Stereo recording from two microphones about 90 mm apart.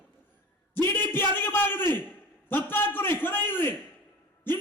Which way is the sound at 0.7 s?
25° left (ahead or behind).